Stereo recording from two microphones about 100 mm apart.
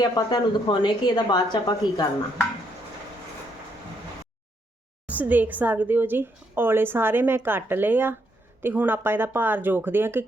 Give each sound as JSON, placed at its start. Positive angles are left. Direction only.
{"t": 0.0, "sound": "a woman's voice", "side_deg": 45}
{"t": 5.0, "sound": "a woman's voice", "side_deg": -15}